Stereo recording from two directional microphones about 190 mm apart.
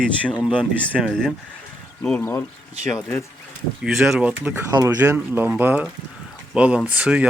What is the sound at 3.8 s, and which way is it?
Speech, centre (ahead or behind).